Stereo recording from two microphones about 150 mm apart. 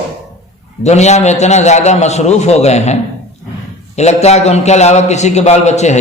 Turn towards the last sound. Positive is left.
turn(degrees=50)  # may be behind; listen again after turning